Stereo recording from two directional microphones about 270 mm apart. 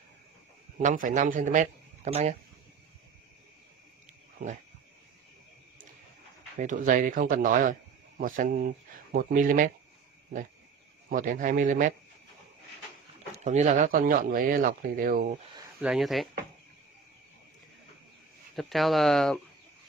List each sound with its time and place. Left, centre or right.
0.8 s speech: right
6.6 s speech: right
11.1 s speech: right
13.4 s speech: right
15.5 s speech: centre
18.6 s speech: centre